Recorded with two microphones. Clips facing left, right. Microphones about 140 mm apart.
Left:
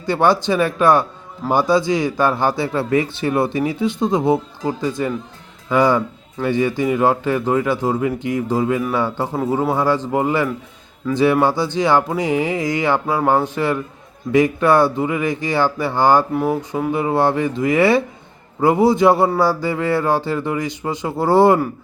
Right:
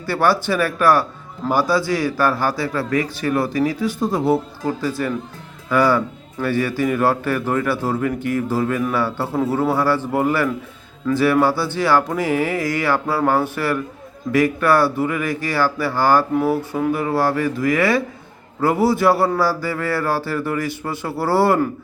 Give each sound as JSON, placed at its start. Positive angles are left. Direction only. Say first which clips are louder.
{"t": 0.0, "sound": "a man's voice", "louder": "left 2 dB", "side_deg": 20}